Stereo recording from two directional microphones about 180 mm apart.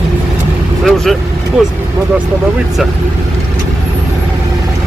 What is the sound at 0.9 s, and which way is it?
Speech, centre (ahead or behind).